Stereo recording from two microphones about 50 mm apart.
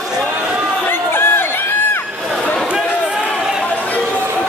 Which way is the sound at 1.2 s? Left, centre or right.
Left.